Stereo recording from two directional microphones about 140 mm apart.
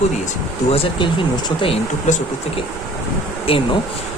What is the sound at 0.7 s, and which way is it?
Speech, 40° left (ahead or behind).